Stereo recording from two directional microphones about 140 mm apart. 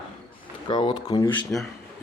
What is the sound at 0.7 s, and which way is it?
Speech, 35° left (ahead or behind).